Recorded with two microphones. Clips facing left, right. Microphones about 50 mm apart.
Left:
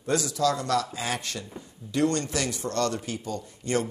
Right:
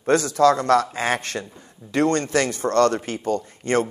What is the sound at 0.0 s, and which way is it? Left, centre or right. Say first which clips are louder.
Speech: right 8 dB; right.